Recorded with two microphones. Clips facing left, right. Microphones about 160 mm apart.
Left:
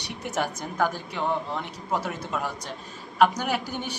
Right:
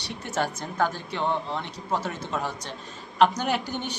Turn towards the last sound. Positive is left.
turn(degrees=10)  # may be behind; listen again after turning